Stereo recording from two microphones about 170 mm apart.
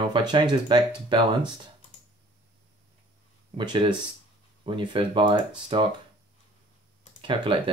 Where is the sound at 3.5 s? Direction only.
30° right (ahead or behind).